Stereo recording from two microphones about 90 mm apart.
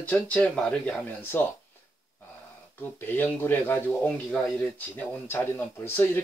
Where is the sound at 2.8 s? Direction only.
25° left (ahead or behind).